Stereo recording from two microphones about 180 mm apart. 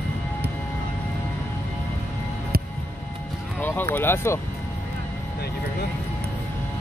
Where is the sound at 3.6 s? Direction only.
10° left (ahead or behind).